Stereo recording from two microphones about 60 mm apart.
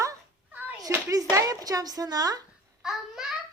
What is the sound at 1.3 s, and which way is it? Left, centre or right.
Speech, right.